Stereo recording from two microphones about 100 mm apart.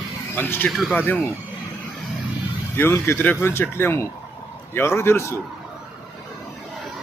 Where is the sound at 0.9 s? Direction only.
15° left (ahead or behind).